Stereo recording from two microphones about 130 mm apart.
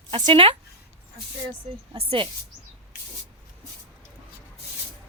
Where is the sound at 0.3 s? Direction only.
40° right (ahead or behind).